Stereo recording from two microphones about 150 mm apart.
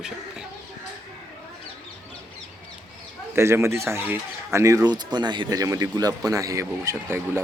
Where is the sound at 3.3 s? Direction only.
15° right (ahead or behind).